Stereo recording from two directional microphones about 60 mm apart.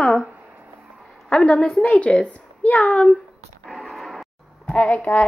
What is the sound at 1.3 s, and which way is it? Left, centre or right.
Speech, centre.